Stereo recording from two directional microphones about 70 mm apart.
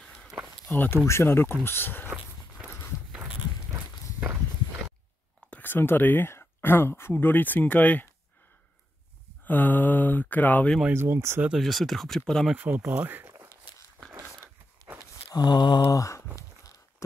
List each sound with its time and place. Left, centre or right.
0.0 s walk: centre
0.7 s speech: left
2.0 s a sound: right
3.1 s walk: centre
5.5 s speech: left
9.4 s speech: left
10.9 s speech: right
11.5 s speech: centre
12.5 s speech: right
14.1 s a sound: right
15.3 s mantra: left
15.9 s speech: left